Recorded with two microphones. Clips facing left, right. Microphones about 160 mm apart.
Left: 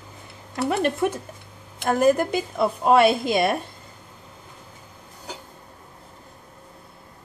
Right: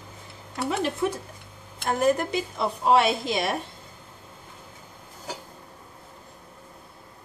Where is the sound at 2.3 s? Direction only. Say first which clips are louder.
Left 4 dB; 55° left (ahead or behind).